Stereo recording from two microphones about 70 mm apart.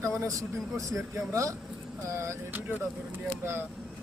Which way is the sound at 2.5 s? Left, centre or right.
Right.